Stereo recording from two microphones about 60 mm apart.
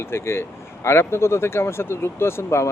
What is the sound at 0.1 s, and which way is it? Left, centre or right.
Speech, left.